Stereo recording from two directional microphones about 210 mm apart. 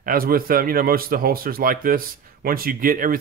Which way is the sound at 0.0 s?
45° right (ahead or behind).